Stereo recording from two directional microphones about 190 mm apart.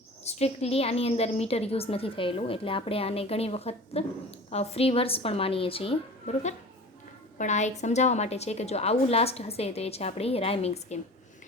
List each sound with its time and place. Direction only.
0.3 s a woman's voice: 35° left (ahead or behind)